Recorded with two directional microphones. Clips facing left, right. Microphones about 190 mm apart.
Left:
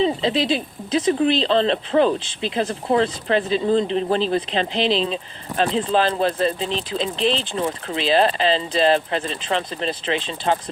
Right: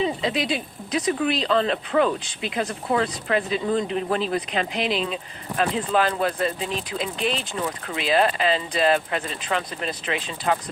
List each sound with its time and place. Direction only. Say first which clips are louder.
0.0 s speech: left 4 dB; 30° left (ahead or behind)